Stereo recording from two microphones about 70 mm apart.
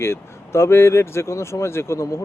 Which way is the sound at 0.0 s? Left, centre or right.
Left.